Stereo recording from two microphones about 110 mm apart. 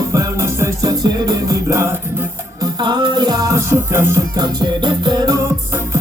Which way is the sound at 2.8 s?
45° right (ahead or behind).